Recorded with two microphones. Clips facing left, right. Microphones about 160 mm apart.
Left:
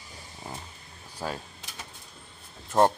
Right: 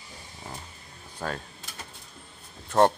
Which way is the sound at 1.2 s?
10° left (ahead or behind).